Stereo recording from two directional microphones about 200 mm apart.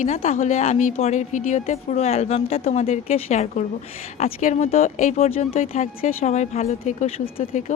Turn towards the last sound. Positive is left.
turn(degrees=30)  # may be behind; listen again after turning